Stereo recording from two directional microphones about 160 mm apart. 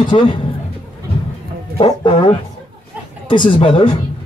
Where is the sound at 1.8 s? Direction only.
35° left (ahead or behind).